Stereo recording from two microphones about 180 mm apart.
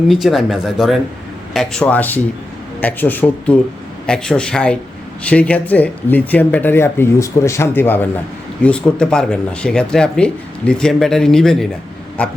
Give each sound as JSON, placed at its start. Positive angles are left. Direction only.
{"t": 0.1, "sound": "speech", "side_deg": 0}